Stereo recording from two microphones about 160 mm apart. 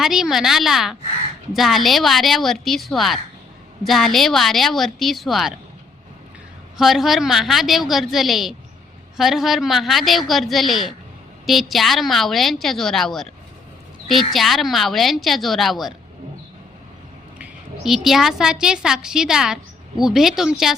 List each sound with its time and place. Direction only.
0.0 s a woman's voice: centre (ahead or behind)
6.7 s a woman's voice: centre (ahead or behind)
14.3 s a woman's voice: centre (ahead or behind)
17.3 s a sound: 5° right (ahead or behind)
18.6 s a woman's voice: 5° right (ahead or behind)